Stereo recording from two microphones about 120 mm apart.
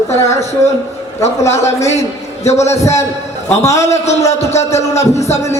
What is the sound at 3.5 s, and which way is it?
Speech, 25° left (ahead or behind).